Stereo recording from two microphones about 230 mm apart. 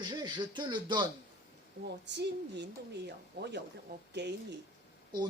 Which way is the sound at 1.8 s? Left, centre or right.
Right.